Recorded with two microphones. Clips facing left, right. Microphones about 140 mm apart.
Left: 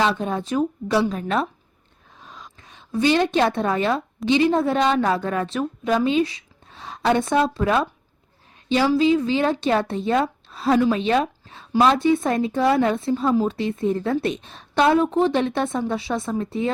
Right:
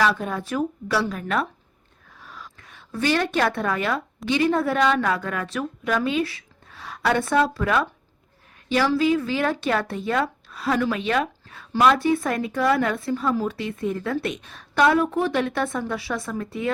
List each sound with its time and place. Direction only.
0.0 s speech: 25° left (ahead or behind)
2.1 s a sound: 20° left (ahead or behind)
4.3 s speech: 20° left (ahead or behind)